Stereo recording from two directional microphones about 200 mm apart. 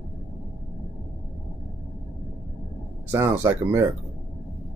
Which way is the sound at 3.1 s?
10° right (ahead or behind).